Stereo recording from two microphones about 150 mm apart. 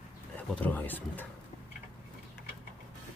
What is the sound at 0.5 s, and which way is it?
Speech, 10° left (ahead or behind).